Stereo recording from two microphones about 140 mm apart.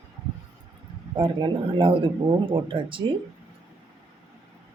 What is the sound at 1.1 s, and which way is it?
Speech, 35° right (ahead or behind).